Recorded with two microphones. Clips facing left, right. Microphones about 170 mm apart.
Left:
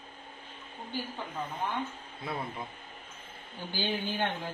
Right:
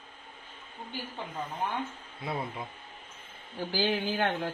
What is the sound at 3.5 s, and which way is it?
Speech, 90° right.